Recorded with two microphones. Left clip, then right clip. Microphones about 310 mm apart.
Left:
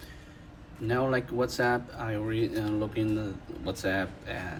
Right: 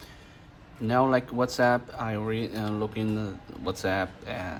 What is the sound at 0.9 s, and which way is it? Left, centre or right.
Speech, centre.